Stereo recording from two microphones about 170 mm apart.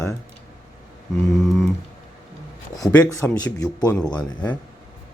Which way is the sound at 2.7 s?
20° left (ahead or behind).